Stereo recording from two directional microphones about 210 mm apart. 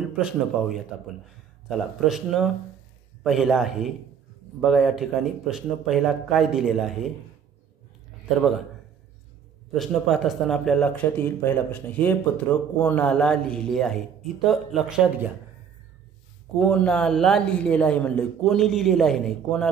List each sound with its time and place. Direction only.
0.2 s speech: centre (ahead or behind)
9.8 s speech: centre (ahead or behind)
16.5 s speech: 5° left (ahead or behind)